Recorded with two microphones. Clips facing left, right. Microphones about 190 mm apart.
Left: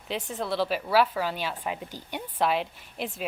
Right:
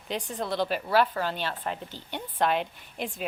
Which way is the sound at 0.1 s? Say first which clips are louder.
Left 1 dB; centre (ahead or behind).